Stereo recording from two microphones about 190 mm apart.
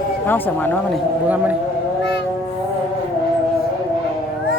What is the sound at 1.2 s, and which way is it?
Speech, 10° right (ahead or behind).